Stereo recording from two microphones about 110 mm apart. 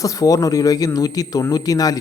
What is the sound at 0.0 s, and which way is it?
Speech, 30° left (ahead or behind).